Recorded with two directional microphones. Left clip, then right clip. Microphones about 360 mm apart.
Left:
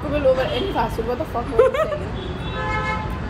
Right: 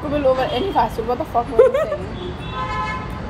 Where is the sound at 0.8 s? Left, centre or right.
Centre.